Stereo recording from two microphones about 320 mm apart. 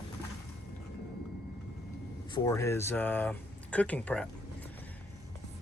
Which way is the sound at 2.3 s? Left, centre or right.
Centre.